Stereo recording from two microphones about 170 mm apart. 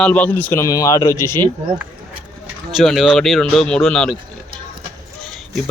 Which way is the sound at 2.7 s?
Centre (ahead or behind).